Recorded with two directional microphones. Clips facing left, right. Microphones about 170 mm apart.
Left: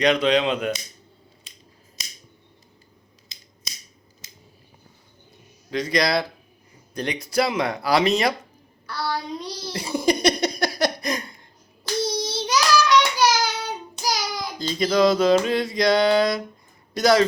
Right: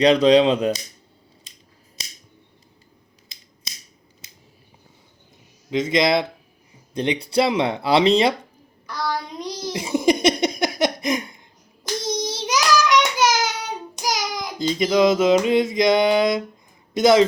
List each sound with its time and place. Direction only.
0.0 s speech: 35° right (ahead or behind)
5.7 s speech: 20° right (ahead or behind)
8.9 s a sound: 15° right (ahead or behind)
11.8 s child singing: 20° right (ahead or behind)
16.9 s speech: 20° right (ahead or behind)